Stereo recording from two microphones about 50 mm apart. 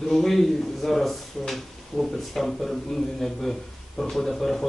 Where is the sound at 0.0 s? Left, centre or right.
Centre.